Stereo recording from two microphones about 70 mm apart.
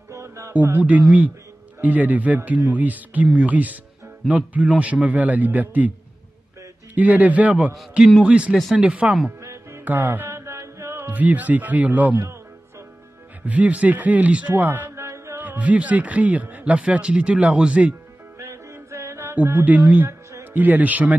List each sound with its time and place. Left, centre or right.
0.1 s music: right
0.5 s a man's voice: right
7.0 s a man's voice: right
9.4 s music: right
9.8 s mantra: right
11.1 s a man's voice: right
13.5 s a man's voice: right
14.5 s music: right
15.4 s a man's voice: right
18.4 s music: right
19.3 s a man's voice: right